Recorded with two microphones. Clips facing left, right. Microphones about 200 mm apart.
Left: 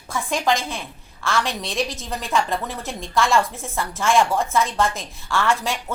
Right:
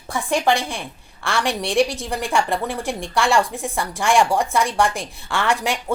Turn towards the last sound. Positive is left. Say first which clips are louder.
# right 2 dB
turn(degrees=-15)  # may be behind; listen again after turning